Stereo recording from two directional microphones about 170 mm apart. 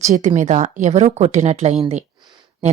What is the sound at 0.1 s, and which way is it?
Speech, 45° right (ahead or behind).